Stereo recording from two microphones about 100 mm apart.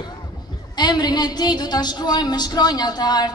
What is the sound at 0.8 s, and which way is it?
A woman's voice, 45° left (ahead or behind).